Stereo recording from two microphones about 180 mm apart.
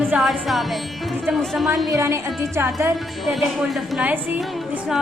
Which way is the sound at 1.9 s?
15° right (ahead or behind).